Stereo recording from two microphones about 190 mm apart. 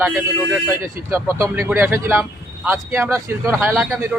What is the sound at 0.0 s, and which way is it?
Speech, 10° right (ahead or behind).